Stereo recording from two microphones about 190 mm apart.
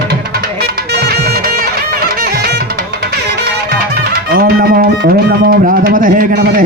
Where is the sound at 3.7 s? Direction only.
50° right (ahead or behind).